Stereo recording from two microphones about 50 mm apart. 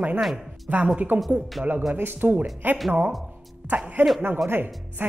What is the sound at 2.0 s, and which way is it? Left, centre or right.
Speech, right.